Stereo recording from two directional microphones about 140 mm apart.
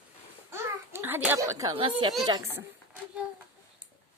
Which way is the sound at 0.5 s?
15° right (ahead or behind).